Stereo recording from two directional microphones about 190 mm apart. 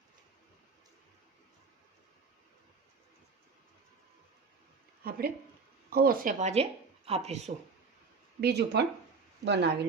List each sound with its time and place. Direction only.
5.0 s speech: 50° right (ahead or behind); by 7.5 s 35° right (ahead or behind)
8.4 s speech: 60° right (ahead or behind)